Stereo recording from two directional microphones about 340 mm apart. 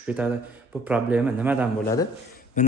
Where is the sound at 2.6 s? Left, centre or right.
Left.